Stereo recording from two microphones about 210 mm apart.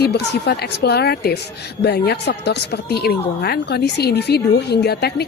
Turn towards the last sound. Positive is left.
turn(degrees=50)  # may be behind; listen again after turning